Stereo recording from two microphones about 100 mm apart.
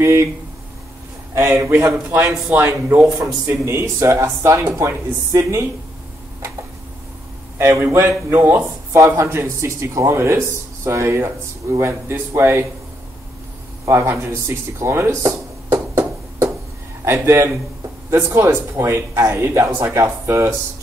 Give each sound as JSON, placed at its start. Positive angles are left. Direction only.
{"t": 0.0, "sound": "speech", "side_deg": -25}
{"t": 1.3, "sound": "speech", "side_deg": -25}
{"t": 7.5, "sound": "speech", "side_deg": -25}
{"t": 13.8, "sound": "speech", "side_deg": -25}
{"t": 14.5, "sound": "a sound", "side_deg": -25}
{"t": 17.0, "sound": "speech", "side_deg": -25}